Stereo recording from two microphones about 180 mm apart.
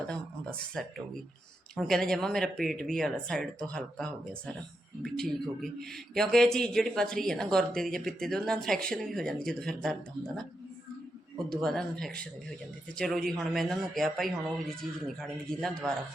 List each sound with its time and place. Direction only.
0.7 s a man's voice: 5° left (ahead or behind)
11.5 s a man's voice: 5° left (ahead or behind)